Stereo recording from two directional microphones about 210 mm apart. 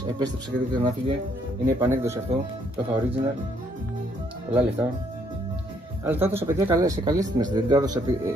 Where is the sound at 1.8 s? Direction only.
15° right (ahead or behind).